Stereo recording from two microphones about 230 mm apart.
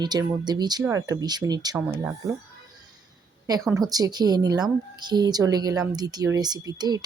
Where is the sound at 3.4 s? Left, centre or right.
Centre.